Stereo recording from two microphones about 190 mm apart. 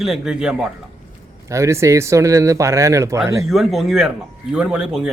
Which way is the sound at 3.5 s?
Centre (ahead or behind).